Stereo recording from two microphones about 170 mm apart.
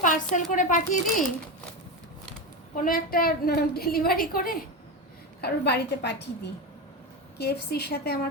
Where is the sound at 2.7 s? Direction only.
55° left (ahead or behind).